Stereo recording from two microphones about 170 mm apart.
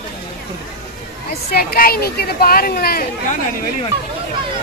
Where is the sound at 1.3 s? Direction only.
65° left (ahead or behind).